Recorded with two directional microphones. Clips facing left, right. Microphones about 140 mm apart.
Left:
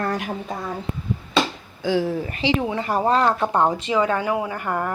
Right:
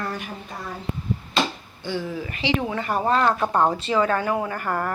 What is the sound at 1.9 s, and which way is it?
Speech, 90° left.